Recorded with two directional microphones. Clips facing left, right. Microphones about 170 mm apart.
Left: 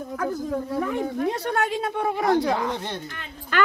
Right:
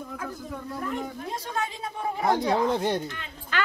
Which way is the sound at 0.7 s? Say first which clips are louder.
Left 5 dB; 65° left (ahead or behind).